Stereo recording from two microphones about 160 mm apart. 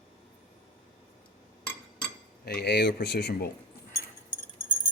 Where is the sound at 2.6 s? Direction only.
90° left.